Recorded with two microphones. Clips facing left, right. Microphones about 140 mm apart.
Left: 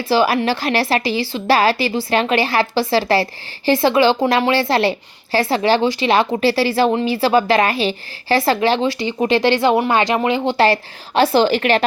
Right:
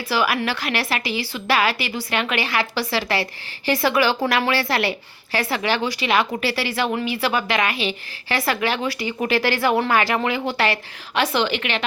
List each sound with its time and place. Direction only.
0.0 s a woman's voice: 30° left (ahead or behind)